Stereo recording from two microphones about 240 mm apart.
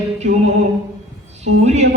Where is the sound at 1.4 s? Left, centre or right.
Right.